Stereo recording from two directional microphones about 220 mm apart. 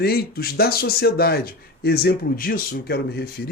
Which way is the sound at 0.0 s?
45° left (ahead or behind).